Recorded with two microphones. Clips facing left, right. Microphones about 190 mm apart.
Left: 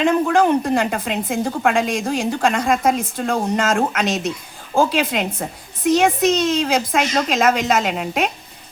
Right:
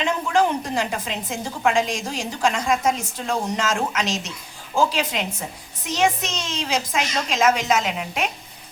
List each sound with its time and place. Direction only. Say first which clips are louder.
0.0 s a woman's voice: left 5 dB; 55° left (ahead or behind)